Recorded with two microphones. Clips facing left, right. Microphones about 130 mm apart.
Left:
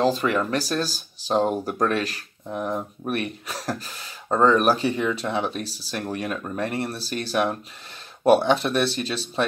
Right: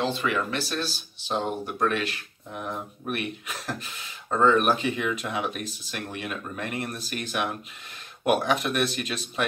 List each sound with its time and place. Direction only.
0.0 s speech: 40° left (ahead or behind)